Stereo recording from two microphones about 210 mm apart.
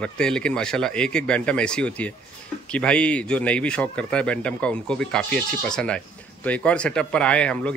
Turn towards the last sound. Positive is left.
turn(degrees=5)  # may be behind; listen again after turning